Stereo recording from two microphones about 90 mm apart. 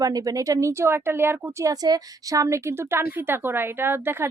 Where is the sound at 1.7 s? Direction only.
40° right (ahead or behind); by 4.2 s 25° right (ahead or behind).